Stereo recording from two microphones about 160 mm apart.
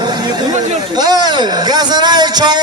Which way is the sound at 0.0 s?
25° right (ahead or behind).